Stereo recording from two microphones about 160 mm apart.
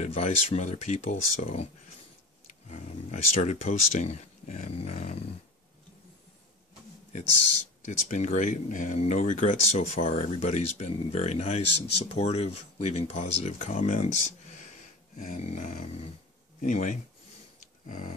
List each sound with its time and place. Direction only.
0.0 s speech: 40° left (ahead or behind)
7.8 s speech: 50° left (ahead or behind)
15.1 s dog: 55° left (ahead or behind)
15.4 s speech: 50° left (ahead or behind)
17.6 s a sound: 55° left (ahead or behind)